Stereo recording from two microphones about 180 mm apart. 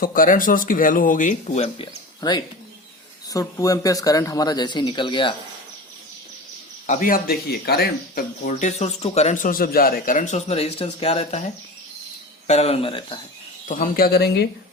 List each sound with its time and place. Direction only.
0.0 s speech: 50° left (ahead or behind); by 1.9 s 35° left (ahead or behind)
2.2 s speech: 20° left (ahead or behind)
6.8 s speech: 45° left (ahead or behind)
12.5 s speech: 35° left (ahead or behind)
13.7 s speech: 50° left (ahead or behind)